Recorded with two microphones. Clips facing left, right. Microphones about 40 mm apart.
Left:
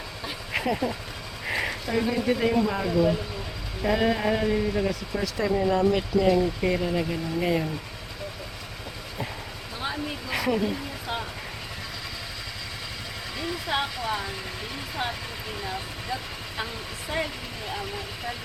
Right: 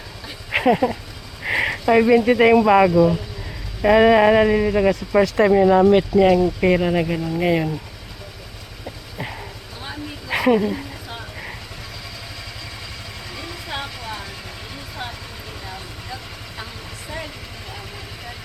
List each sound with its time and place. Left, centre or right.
0.5 s speech: right
1.5 s a sound: right
1.9 s speech: right
10.3 s dog: right
13.3 s vehicle: centre
15.6 s vehicle: centre